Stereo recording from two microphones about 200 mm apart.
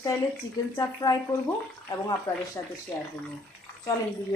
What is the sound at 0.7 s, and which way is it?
Speech, 20° left (ahead or behind).